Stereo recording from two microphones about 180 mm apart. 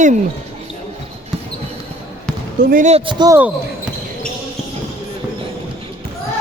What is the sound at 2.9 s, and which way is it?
Speech, 25° right (ahead or behind).